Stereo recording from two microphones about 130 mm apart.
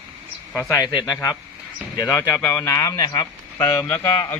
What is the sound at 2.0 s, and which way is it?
A man's voice, 10° left (ahead or behind).